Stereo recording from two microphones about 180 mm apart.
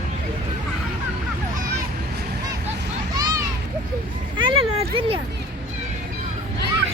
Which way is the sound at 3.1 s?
20° right (ahead or behind).